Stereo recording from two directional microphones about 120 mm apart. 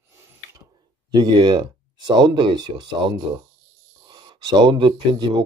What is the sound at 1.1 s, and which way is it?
Speech, 35° right (ahead or behind).